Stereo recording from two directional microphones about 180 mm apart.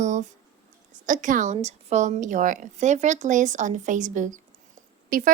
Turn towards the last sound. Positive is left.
turn(degrees=-50)  # may be behind; listen again after turning